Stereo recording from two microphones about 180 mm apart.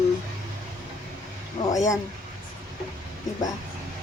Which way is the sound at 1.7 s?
20° left (ahead or behind).